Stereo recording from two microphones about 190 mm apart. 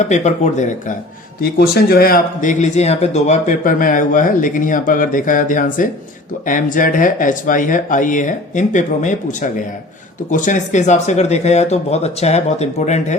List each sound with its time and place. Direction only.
0.0 s speech: 40° left (ahead or behind)
1.4 s speech: 55° left (ahead or behind); by 13.1 s 35° left (ahead or behind)